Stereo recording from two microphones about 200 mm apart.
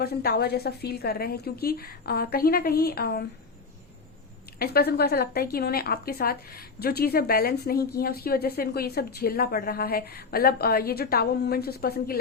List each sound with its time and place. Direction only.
0.0 s a woman's voice: 50° left (ahead or behind)
4.6 s a woman's voice: 50° left (ahead or behind)